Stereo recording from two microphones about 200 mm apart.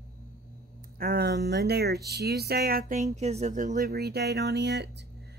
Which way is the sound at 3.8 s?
55° right (ahead or behind).